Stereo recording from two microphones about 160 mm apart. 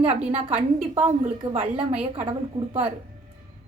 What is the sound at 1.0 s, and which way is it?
Speech, 35° right (ahead or behind).